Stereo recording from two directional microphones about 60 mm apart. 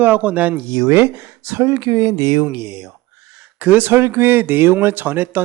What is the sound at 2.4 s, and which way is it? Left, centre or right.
Speech, right.